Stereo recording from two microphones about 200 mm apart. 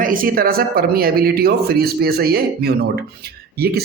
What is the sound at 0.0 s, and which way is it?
Speech, 45° right (ahead or behind).